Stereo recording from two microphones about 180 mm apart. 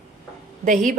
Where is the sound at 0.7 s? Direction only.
45° right (ahead or behind).